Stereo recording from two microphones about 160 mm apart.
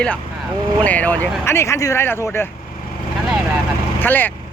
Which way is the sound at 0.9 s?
10° left (ahead or behind).